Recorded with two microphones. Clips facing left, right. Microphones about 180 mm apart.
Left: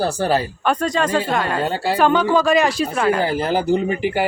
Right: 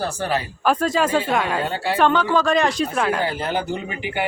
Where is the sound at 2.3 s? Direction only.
5° left (ahead or behind).